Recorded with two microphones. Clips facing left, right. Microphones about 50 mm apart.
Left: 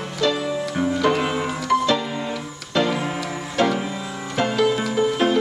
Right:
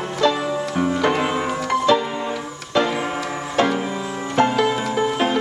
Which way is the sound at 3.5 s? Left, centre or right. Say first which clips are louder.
Right 1 dB; centre.